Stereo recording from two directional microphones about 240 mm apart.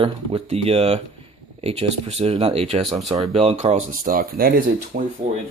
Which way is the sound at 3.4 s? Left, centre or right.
Right.